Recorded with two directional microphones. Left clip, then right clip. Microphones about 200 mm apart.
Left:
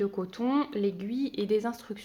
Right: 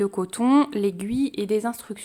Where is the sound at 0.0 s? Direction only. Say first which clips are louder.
Right 7 dB; 45° right (ahead or behind).